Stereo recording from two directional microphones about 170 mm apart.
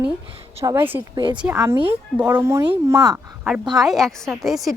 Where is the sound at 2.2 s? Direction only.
15° right (ahead or behind).